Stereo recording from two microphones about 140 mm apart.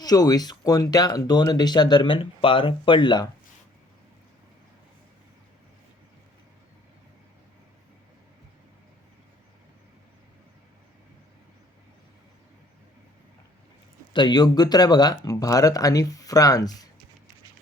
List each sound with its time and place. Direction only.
0.0 s speech: 25° left (ahead or behind)
14.1 s speech: 35° left (ahead or behind)